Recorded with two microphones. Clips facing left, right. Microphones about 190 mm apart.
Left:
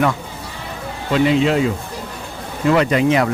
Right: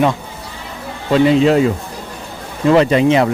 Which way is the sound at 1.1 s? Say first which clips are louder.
Right 4 dB; 35° right (ahead or behind).